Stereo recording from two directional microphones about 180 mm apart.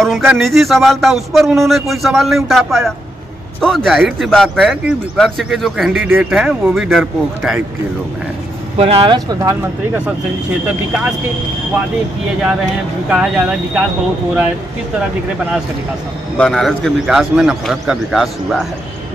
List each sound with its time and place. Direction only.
0.0 s speech: centre (ahead or behind)
8.7 s speech: 35° right (ahead or behind); by 10.0 s 20° right (ahead or behind)
13.1 s speech: 5° right (ahead or behind)
16.3 s speech: 5° left (ahead or behind)